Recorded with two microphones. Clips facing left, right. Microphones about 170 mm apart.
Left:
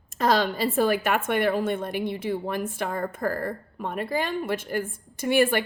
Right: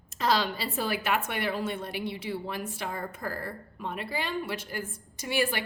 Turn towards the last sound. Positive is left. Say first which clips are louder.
# left 8 dB
turn(degrees=55)  # may be behind; listen again after turning